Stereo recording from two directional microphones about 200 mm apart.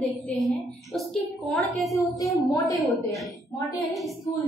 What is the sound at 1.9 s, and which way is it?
Speech, 15° left (ahead or behind).